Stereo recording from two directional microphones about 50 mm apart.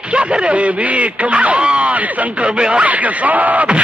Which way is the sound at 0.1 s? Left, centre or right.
Right.